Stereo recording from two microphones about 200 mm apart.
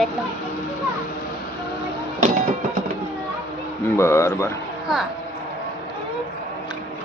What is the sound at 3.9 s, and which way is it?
Speech, 15° left (ahead or behind).